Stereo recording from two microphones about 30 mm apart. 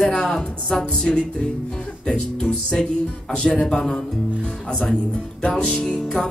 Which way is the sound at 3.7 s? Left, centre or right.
Left.